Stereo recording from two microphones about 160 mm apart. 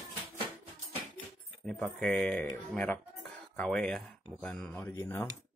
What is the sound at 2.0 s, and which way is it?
Speech, 5° left (ahead or behind).